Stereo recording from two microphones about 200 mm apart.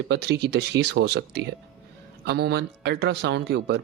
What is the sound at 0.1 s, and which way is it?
A man's voice, 55° right (ahead or behind).